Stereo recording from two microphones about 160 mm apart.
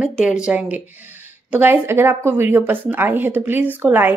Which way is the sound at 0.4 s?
5° right (ahead or behind).